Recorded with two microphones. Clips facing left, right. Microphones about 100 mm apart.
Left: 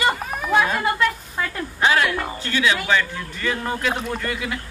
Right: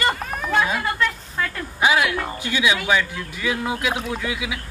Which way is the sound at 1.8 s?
15° right (ahead or behind).